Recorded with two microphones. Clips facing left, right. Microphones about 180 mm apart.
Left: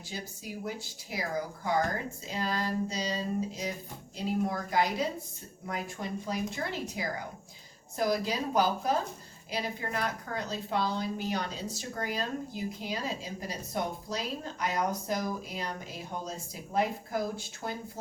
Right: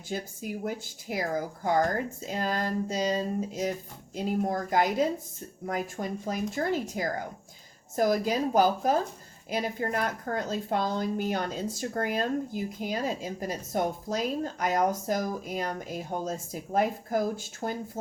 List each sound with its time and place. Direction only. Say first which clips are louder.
0.1 s a woman's voice: right 7 dB; 50° right (ahead or behind)